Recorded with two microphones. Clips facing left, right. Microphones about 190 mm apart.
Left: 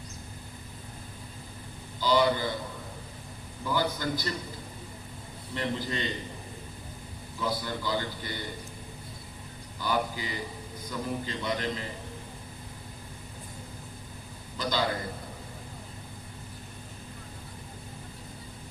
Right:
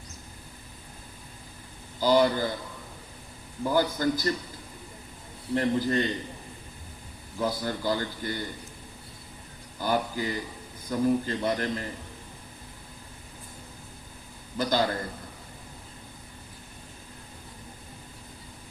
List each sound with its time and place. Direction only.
2.0 s speech: 50° right (ahead or behind)
3.6 s a man's voice: 45° right (ahead or behind)
5.5 s a man's voice: 50° right (ahead or behind)
7.3 s a man's voice: 45° right (ahead or behind)
9.8 s a man's voice: 45° right (ahead or behind)
14.6 s a man's voice: 50° right (ahead or behind)